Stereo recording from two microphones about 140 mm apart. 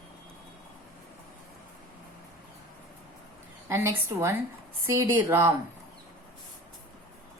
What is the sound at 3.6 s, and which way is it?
A woman's voice, 20° right (ahead or behind).